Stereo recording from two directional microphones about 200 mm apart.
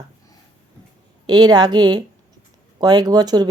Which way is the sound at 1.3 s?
20° right (ahead or behind).